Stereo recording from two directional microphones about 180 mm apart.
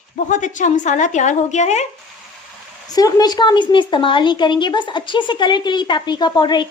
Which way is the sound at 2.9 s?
20° left (ahead or behind).